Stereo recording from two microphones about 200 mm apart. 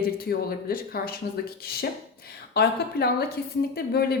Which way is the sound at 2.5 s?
50° left (ahead or behind).